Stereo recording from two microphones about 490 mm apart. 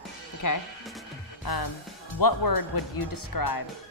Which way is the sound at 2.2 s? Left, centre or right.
Left.